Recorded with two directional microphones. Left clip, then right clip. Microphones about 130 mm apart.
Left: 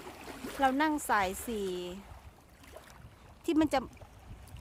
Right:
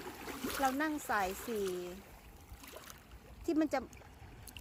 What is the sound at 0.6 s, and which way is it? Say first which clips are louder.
Speech: left 7 dB; 30° left (ahead or behind).